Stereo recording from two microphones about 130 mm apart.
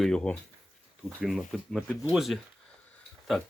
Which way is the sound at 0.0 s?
5° left (ahead or behind).